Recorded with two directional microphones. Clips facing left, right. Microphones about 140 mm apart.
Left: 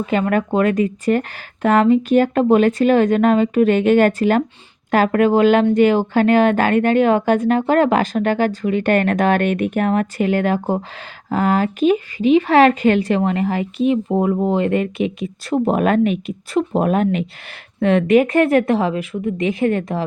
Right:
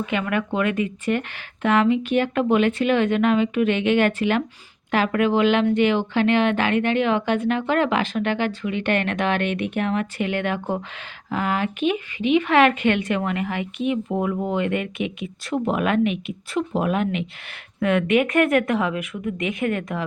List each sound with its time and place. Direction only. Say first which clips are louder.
0.0 s speech: left 6 dB; 40° left (ahead or behind)